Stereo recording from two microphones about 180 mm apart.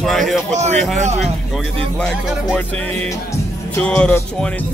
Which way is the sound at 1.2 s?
Centre (ahead or behind).